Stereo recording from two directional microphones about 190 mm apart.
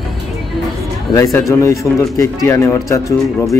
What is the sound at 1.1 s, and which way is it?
Speech, 15° left (ahead or behind).